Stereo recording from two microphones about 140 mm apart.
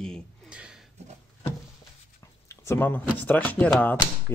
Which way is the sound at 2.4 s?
20° left (ahead or behind).